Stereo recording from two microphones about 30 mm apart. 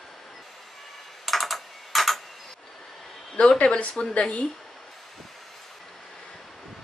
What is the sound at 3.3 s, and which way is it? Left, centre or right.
Speech, left.